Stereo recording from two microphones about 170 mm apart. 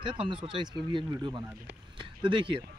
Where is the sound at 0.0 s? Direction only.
30° right (ahead or behind).